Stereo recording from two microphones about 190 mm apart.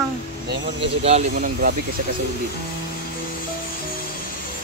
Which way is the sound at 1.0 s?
35° right (ahead or behind).